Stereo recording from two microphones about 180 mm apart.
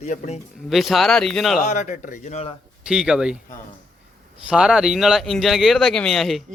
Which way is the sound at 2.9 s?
5° right (ahead or behind).